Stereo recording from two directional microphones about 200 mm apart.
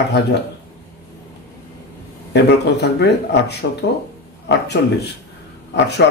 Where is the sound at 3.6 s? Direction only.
60° left (ahead or behind).